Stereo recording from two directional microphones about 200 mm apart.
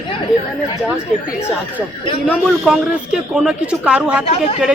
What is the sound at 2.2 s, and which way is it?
A man's voice, 5° left (ahead or behind).